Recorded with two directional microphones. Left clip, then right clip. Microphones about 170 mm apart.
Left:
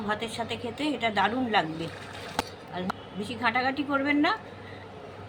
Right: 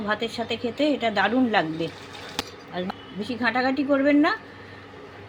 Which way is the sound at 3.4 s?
40° right (ahead or behind).